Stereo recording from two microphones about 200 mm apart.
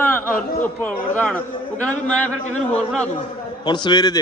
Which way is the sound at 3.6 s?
20° left (ahead or behind).